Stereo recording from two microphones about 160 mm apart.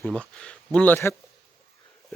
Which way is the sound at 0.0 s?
5° left (ahead or behind).